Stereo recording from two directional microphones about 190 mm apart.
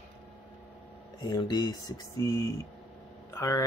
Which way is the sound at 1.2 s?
25° left (ahead or behind).